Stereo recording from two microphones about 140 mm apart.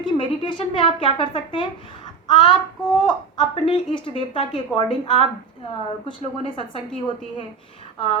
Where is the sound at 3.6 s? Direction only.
40° left (ahead or behind).